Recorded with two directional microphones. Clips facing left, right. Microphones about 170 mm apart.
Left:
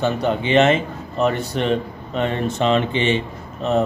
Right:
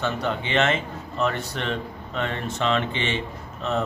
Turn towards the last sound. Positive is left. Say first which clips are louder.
# left 7 dB
turn(degrees=15)  # may be behind; listen again after turning